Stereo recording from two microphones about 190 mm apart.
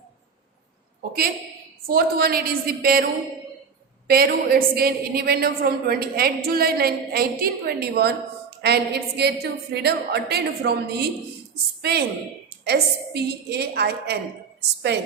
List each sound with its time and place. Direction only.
1.9 s a woman's voice: 50° right (ahead or behind)
4.0 s a woman's voice: 55° right (ahead or behind)